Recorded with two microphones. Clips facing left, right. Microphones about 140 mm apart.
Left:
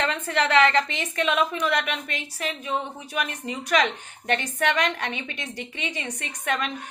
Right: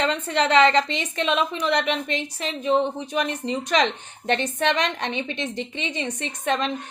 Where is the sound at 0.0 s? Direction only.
20° right (ahead or behind).